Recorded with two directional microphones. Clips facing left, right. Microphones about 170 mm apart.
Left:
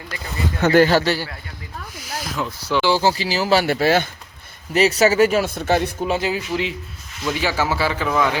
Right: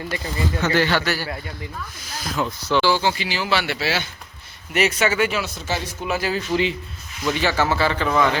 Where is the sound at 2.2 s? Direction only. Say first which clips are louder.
Right 3 dB; centre (ahead or behind).